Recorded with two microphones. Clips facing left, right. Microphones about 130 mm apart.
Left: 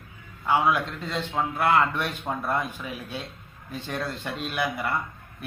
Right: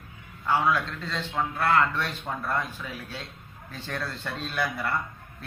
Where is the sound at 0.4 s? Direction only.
15° left (ahead or behind).